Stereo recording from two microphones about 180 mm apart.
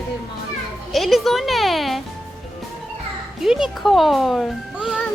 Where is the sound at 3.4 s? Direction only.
5° right (ahead or behind).